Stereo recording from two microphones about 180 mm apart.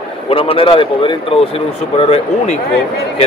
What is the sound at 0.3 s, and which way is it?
Speech, 30° left (ahead or behind).